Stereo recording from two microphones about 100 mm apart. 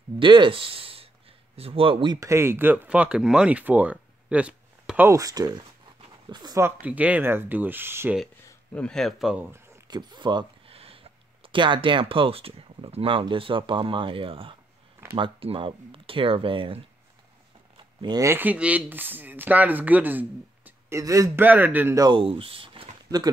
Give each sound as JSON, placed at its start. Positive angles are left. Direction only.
{"t": 0.2, "sound": "speech", "side_deg": -55}
{"t": 2.1, "sound": "speech", "side_deg": -30}
{"t": 5.0, "sound": "speech", "side_deg": -35}
{"t": 6.6, "sound": "speech", "side_deg": -15}
{"t": 8.7, "sound": "speech", "side_deg": 5}
{"t": 9.8, "sound": "speech", "side_deg": -45}
{"t": 10.7, "sound": "speech", "side_deg": -70}
{"t": 18.2, "sound": "speech", "side_deg": -20}
{"t": 20.9, "sound": "speech", "side_deg": -35}
{"t": 21.4, "sound": "speech", "side_deg": -15}
{"t": 22.1, "sound": "speech", "side_deg": -65}
{"t": 23.0, "sound": "speech", "side_deg": -40}